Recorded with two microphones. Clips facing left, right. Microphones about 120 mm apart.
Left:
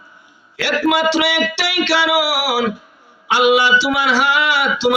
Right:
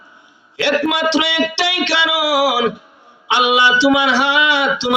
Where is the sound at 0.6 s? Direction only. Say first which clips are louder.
Even; 25° right (ahead or behind).